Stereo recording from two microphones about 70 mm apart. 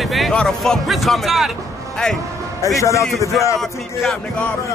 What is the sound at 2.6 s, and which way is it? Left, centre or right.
Speech, left.